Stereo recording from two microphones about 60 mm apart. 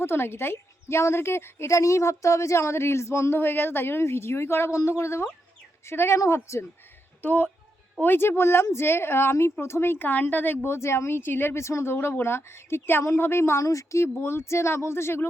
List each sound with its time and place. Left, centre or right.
0.0 s a woman's voice: left
7.2 s speech: left
8.0 s a woman's voice: left
11.9 s a woman's voice: left
13.7 s speech: left
14.2 s a woman's voice: left